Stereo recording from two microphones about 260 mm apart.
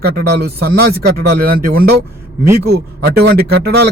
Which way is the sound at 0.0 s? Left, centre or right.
Right.